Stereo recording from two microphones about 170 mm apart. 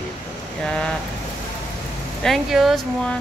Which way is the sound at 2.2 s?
Centre (ahead or behind).